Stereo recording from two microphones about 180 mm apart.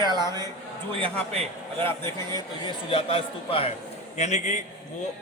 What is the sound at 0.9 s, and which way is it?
Speech, 35° right (ahead or behind).